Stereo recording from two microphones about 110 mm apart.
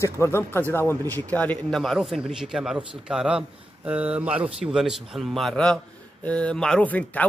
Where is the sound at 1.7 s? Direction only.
Centre (ahead or behind).